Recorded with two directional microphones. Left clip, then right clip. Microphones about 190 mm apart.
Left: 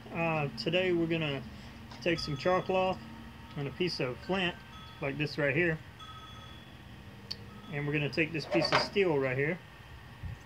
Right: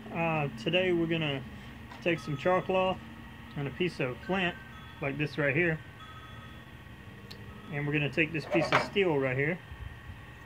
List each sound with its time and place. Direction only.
0.1 s a sound: 5° right (ahead or behind)
0.7 s speech: 5° right (ahead or behind)
2.1 s speech: 60° right (ahead or behind)
2.4 s speech: 10° right (ahead or behind)
7.7 s speech: 5° right (ahead or behind)